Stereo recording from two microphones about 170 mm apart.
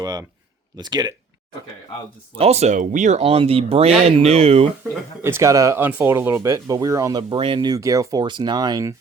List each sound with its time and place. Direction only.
0.0 s speech: 20° right (ahead or behind)
2.4 s speech: 40° right (ahead or behind)
4.8 s speech: 15° right (ahead or behind)